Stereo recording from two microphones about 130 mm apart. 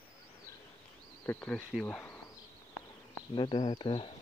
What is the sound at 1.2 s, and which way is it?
Speech, 10° left (ahead or behind).